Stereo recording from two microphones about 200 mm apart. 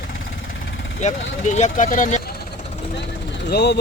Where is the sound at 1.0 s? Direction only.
35° left (ahead or behind).